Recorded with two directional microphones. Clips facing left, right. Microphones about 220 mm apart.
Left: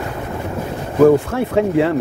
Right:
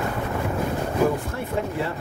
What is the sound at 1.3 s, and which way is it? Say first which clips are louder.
Speech: left 11 dB; 75° left (ahead or behind).